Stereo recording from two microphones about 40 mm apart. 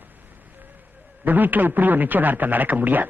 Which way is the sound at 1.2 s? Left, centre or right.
Right.